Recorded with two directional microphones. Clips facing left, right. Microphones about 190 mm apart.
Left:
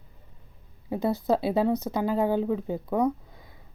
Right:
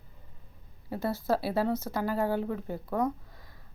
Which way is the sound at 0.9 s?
20° left (ahead or behind).